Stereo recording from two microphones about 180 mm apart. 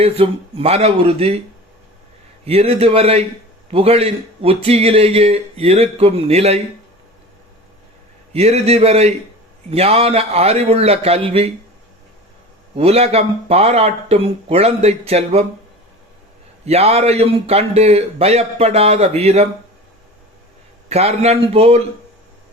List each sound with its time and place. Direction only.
0.0 s a man's voice: 30° right (ahead or behind)
2.4 s a man's voice: 35° right (ahead or behind)
8.3 s a man's voice: 35° right (ahead or behind)
12.7 s a man's voice: 35° right (ahead or behind)
16.6 s a man's voice: 35° right (ahead or behind)
20.9 s a man's voice: 35° right (ahead or behind)